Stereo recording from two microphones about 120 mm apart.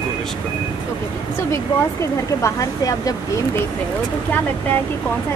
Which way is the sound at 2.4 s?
30° left (ahead or behind).